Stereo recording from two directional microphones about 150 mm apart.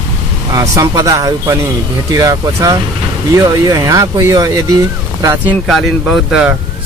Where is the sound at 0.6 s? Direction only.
25° right (ahead or behind).